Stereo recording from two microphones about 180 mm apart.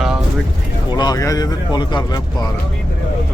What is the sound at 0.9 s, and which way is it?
Speech, 20° left (ahead or behind).